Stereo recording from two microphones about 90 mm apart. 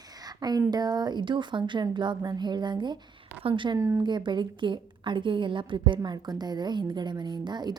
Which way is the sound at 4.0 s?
55° right (ahead or behind).